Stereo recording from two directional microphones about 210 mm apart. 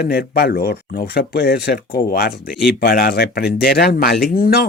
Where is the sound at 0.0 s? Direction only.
45° left (ahead or behind).